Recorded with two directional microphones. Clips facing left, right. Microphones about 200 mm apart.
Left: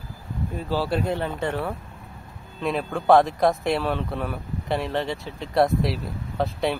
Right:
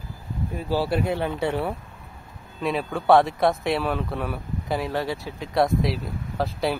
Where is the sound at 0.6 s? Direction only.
10° right (ahead or behind).